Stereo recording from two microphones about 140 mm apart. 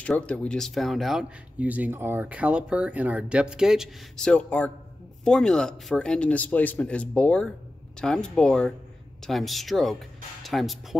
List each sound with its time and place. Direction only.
0.0 s speech: 10° left (ahead or behind)
1.6 s speech: 10° right (ahead or behind)